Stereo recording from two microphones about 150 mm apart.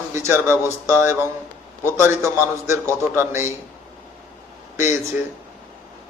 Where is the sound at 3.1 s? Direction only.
15° right (ahead or behind).